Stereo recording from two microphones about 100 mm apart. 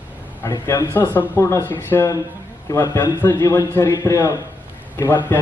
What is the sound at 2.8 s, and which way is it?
Speech, 35° left (ahead or behind).